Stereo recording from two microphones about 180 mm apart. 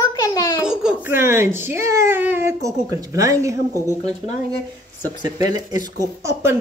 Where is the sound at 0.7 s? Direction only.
5° right (ahead or behind).